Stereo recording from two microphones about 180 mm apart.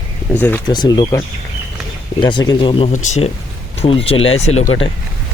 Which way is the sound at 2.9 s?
40° left (ahead or behind).